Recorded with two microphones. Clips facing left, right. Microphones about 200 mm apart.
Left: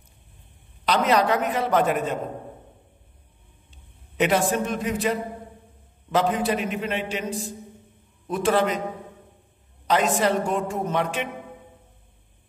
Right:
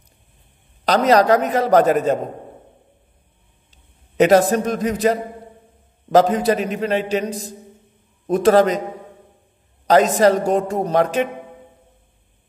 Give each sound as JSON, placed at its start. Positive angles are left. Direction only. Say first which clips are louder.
{"t": 0.8, "sound": "a man's voice", "louder": "right 6 dB", "side_deg": -40}
{"t": 3.7, "sound": "a man's voice", "louder": "right 9 dB", "side_deg": -40}
{"t": 9.8, "sound": "a man's voice", "louder": "right 8 dB", "side_deg": -40}